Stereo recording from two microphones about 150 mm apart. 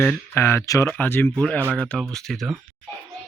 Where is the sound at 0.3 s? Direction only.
15° left (ahead or behind).